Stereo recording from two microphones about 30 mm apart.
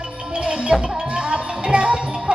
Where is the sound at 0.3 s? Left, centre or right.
Right.